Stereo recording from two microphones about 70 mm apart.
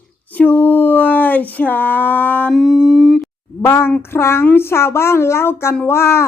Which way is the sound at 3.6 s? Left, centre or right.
Left.